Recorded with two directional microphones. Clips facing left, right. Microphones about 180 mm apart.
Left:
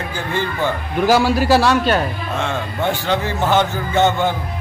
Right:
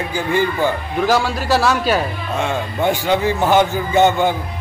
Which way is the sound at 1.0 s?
5° left (ahead or behind).